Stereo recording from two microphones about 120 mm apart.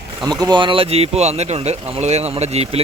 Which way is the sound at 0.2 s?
35° right (ahead or behind).